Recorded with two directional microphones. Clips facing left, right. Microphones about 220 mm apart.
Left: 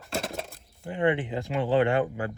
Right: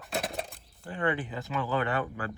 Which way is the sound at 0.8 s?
25° left (ahead or behind).